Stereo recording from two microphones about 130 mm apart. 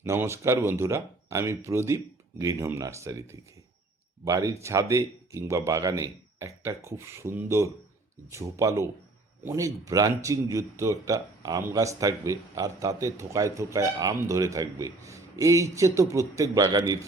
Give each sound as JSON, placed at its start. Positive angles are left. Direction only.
{"t": 0.0, "sound": "a man's voice", "side_deg": -20}